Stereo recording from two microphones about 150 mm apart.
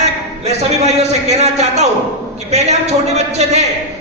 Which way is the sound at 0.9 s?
45° right (ahead or behind).